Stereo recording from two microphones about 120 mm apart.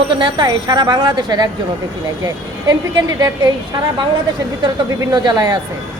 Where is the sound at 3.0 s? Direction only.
35° right (ahead or behind).